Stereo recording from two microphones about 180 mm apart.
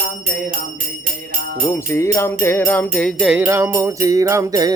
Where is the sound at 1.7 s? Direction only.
15° left (ahead or behind); by 3.4 s centre (ahead or behind).